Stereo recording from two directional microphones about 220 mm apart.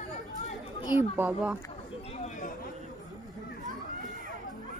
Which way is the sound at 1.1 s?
5° right (ahead or behind).